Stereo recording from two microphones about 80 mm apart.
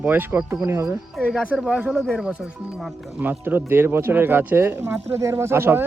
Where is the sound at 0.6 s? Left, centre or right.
Right.